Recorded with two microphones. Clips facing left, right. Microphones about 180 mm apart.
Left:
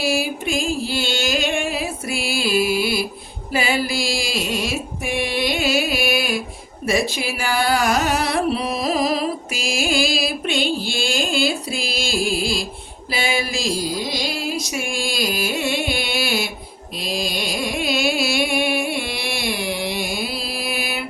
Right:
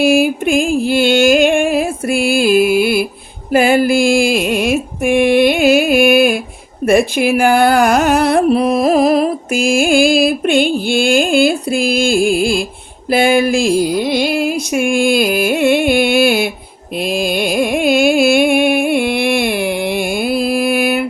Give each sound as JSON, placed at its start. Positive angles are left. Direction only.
{"t": 0.0, "sound": "music", "side_deg": -55}
{"t": 3.5, "sound": "carnatic music", "side_deg": -50}
{"t": 13.1, "sound": "music", "side_deg": -55}
{"t": 17.0, "sound": "carnatic music", "side_deg": -55}